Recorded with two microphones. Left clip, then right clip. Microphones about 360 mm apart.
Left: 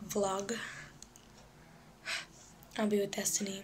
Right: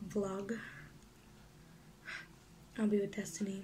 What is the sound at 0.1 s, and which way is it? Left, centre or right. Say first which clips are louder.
Speech: left 6 dB; left.